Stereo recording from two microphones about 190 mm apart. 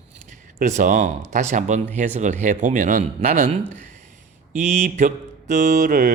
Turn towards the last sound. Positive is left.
turn(degrees=-45)  # may be behind; listen again after turning